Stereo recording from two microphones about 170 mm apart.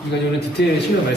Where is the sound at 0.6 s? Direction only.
90° left.